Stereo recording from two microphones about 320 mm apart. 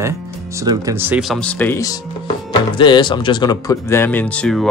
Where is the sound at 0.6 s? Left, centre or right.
Centre.